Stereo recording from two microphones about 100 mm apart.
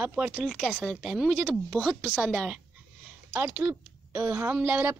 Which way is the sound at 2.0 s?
10° left (ahead or behind).